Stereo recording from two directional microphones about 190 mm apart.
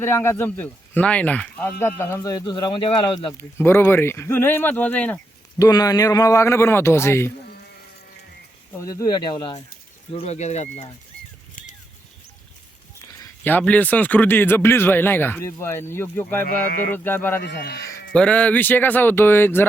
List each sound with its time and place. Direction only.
0.0 s speech: 10° left (ahead or behind)
3.6 s speech: 10° left (ahead or behind)
5.6 s speech: 20° left (ahead or behind)
8.7 s speech: 15° left (ahead or behind); by 10.9 s 35° left (ahead or behind)
13.1 s speech: 15° left (ahead or behind)
16.6 s speech: 50° left (ahead or behind)
16.9 s speech: 10° left (ahead or behind)
17.4 s speech: 55° left (ahead or behind)
18.1 s speech: 5° left (ahead or behind)